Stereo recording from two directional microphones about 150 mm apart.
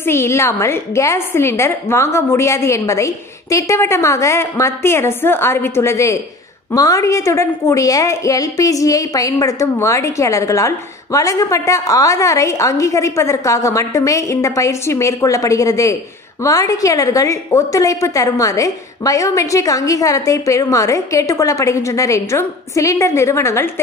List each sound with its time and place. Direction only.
0.0 s a woman's voice: 15° left (ahead or behind)